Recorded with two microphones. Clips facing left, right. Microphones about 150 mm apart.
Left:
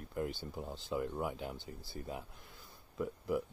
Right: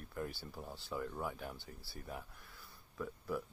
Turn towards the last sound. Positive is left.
turn(degrees=20)  # may be behind; listen again after turning